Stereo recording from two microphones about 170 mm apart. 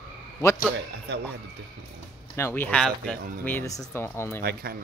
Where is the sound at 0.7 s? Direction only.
90° right.